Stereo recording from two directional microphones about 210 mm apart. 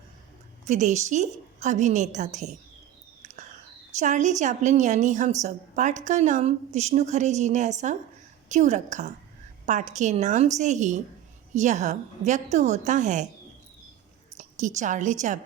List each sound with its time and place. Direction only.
0.6 s a woman's voice: 35° right (ahead or behind)
3.9 s a woman's voice: 35° right (ahead or behind)
14.3 s a woman's voice: 35° right (ahead or behind)